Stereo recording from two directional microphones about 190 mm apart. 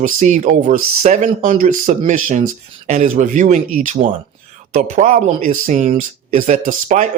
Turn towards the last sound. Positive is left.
turn(degrees=-40)  # may be behind; listen again after turning